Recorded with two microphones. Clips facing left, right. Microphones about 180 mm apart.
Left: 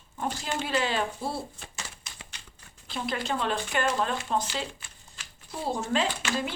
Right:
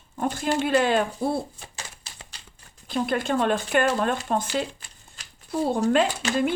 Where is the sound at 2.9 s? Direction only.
50° right (ahead or behind).